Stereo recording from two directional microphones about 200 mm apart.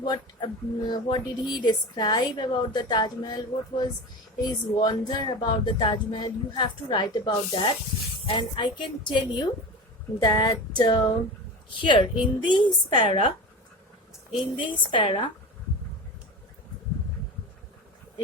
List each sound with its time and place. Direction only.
0.0 s speech: 20° left (ahead or behind)
14.3 s speech: 25° left (ahead or behind)